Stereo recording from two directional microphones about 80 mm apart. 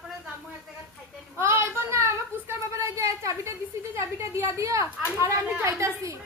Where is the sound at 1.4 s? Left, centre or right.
Right.